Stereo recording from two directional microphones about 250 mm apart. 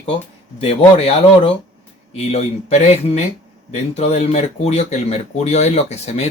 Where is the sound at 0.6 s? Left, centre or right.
Left.